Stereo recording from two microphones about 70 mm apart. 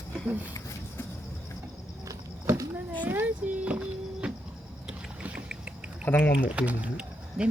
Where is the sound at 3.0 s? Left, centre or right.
Right.